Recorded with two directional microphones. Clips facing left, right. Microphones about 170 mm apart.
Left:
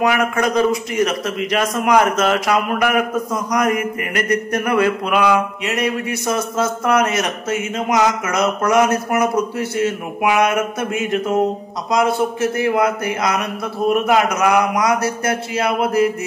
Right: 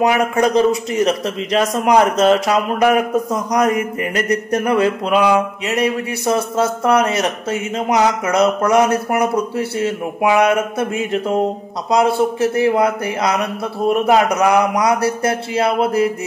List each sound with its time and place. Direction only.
0.0 s a man's voice: 30° right (ahead or behind)
3.5 s mantra: 30° right (ahead or behind)
5.7 s a man's voice: 30° right (ahead or behind)